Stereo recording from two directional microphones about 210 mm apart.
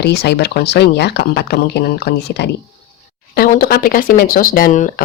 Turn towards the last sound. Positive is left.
turn(degrees=40)  # may be behind; listen again after turning